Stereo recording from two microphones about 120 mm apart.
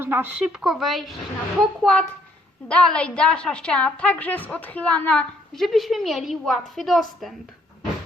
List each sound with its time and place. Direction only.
0.0 s speech: 20° right (ahead or behind)
0.6 s a woman's voice: centre (ahead or behind)